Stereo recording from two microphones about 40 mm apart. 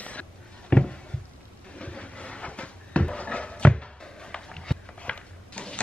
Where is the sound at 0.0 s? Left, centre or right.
Left.